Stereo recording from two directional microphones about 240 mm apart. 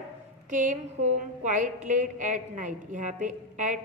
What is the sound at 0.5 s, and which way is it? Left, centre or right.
A woman's voice, right.